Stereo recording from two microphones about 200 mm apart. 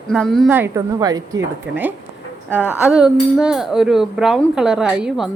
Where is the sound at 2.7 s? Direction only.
5° right (ahead or behind).